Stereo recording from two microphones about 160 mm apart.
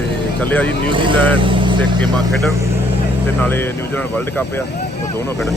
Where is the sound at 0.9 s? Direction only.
30° right (ahead or behind).